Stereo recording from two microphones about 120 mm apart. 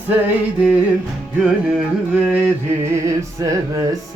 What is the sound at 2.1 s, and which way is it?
Music, 10° right (ahead or behind).